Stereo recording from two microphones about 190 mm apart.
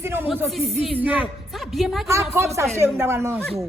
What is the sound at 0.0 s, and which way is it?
A man's voice, 10° right (ahead or behind).